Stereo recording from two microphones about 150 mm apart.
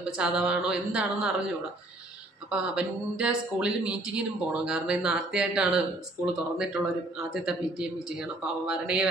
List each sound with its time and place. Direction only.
0.2 s a man's voice: 5° right (ahead or behind)
2.5 s a man's voice: 5° right (ahead or behind)